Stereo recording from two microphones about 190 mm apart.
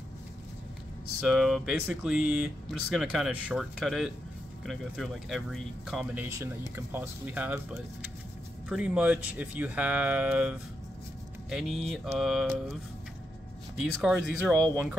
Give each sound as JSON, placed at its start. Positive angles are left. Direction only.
{"t": 1.2, "sound": "speech", "side_deg": -5}
{"t": 6.2, "sound": "speech", "side_deg": -15}
{"t": 11.5, "sound": "speech", "side_deg": 0}
{"t": 13.7, "sound": "speech", "side_deg": -5}